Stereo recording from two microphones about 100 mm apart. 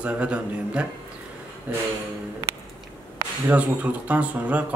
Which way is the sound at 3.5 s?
15° right (ahead or behind).